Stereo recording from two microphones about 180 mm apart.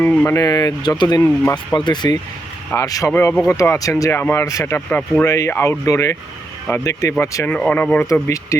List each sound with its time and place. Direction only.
0.0 s speech: 10° left (ahead or behind)